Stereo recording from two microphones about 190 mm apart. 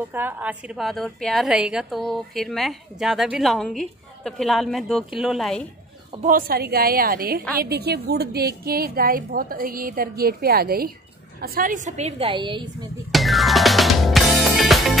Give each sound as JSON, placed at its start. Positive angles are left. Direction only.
{"t": 0.1, "sound": "a woman's voice", "side_deg": -10}
{"t": 6.2, "sound": "a woman's voice", "side_deg": -50}
{"t": 13.1, "sound": "music", "side_deg": 0}